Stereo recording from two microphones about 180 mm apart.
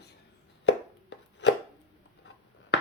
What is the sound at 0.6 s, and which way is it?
Chopping, 80° left.